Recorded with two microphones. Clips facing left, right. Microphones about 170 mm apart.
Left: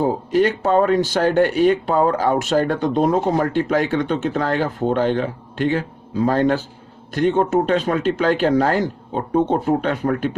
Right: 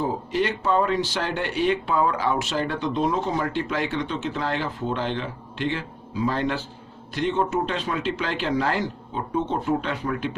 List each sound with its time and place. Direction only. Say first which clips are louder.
0.0 s speech: left 7 dB; 50° left (ahead or behind)